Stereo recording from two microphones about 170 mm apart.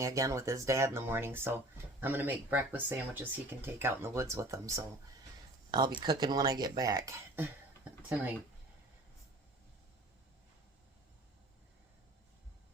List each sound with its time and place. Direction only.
0.0 s speech: 20° right (ahead or behind)
5.7 s speech: 25° right (ahead or behind)